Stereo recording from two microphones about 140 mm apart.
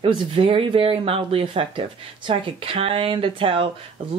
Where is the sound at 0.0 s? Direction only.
40° right (ahead or behind).